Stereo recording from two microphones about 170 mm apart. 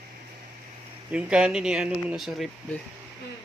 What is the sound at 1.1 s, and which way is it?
Speech, 5° right (ahead or behind).